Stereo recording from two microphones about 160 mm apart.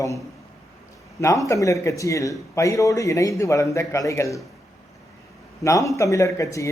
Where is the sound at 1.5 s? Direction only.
20° left (ahead or behind).